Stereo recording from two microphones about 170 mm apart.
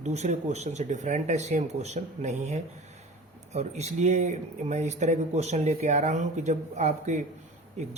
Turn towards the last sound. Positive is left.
turn(degrees=-40)  # may be behind; listen again after turning